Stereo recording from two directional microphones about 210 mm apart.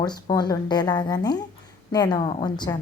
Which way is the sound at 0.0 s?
20° left (ahead or behind).